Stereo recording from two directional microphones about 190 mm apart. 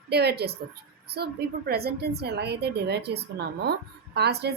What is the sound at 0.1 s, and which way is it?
A woman's voice, 60° right (ahead or behind).